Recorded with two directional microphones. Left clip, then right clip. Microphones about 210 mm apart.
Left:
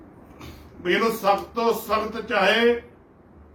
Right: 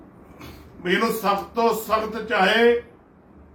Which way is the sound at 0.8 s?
5° right (ahead or behind).